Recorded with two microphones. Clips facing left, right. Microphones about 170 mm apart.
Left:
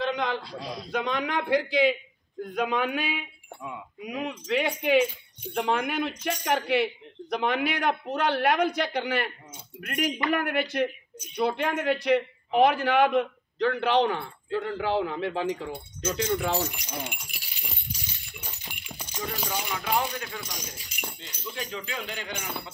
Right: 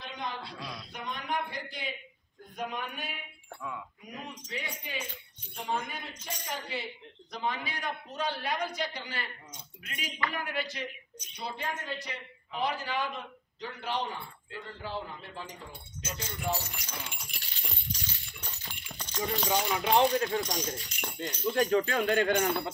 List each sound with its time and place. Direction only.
0.0 s a sound: 85° left
0.4 s a man's voice: centre (ahead or behind)
0.9 s a man's voice: 90° left
16.7 s speech: 15° left (ahead or behind)
17.2 s a sound: 5° left (ahead or behind)
19.5 s speech: 25° right (ahead or behind)
20.7 s speech: 5° left (ahead or behind)
21.5 s speech: 50° right (ahead or behind)